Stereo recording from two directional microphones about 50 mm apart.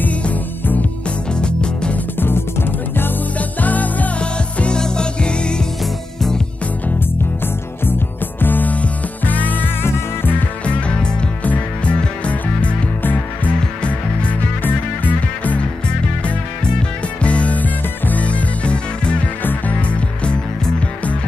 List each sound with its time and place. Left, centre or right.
0.0 s music: left
1.4 s music: centre
2.1 s music: left
3.3 s music: left
4.2 s music: left
8.4 s music: left
9.8 s music: left
10.6 s music: centre
14.6 s music: left
17.2 s music: left